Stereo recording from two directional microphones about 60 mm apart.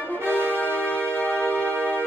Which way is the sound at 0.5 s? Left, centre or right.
Left.